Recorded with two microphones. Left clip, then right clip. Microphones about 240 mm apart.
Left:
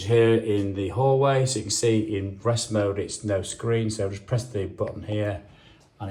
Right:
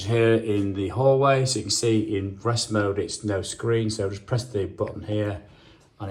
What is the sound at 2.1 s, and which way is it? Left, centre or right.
Speech, right.